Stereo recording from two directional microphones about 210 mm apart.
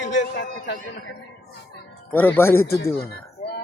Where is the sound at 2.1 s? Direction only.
10° left (ahead or behind).